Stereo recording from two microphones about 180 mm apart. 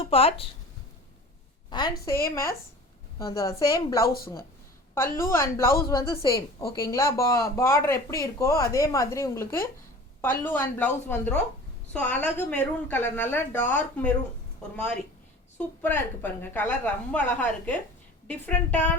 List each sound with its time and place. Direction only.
0.0 s speech: 30° left (ahead or behind)
1.7 s a woman's voice: 20° left (ahead or behind)
5.2 s speech: 15° left (ahead or behind)
15.5 s speech: 10° left (ahead or behind)